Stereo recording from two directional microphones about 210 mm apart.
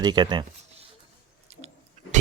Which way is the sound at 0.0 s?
20° right (ahead or behind).